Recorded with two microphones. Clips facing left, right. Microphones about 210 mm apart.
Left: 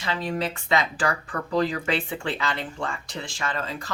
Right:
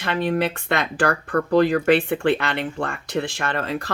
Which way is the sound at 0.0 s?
60° right (ahead or behind).